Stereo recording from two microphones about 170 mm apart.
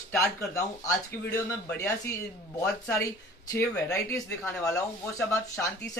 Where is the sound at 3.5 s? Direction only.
15° left (ahead or behind).